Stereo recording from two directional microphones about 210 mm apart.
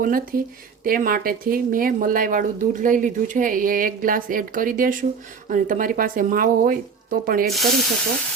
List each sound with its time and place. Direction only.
0.0 s speech: 40° right (ahead or behind)
7.4 s speech: centre (ahead or behind)